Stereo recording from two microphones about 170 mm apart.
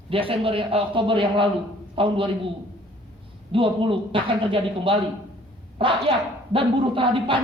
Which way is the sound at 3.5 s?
30° right (ahead or behind).